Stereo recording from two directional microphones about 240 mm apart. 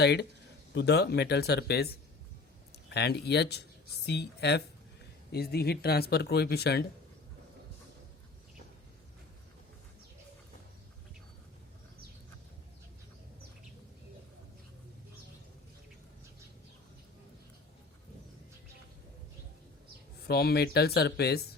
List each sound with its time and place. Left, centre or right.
0.0 s speech: left
2.9 s speech: left
20.2 s speech: left